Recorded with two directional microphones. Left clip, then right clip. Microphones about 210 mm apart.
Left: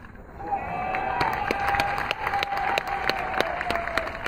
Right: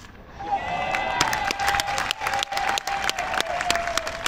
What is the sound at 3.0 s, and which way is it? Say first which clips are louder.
Applause: right 1 dB; 35° right (ahead or behind).